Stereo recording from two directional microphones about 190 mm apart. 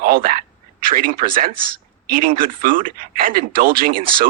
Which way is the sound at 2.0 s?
50° right (ahead or behind).